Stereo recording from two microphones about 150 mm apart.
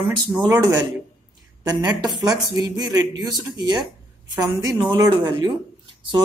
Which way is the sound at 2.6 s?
25° right (ahead or behind).